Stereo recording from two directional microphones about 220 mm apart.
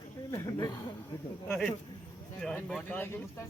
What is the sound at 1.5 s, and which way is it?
Speech, centre (ahead or behind).